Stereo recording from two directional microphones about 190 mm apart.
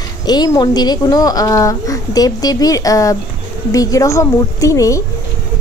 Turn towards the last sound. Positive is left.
turn(degrees=15)  # may be behind; listen again after turning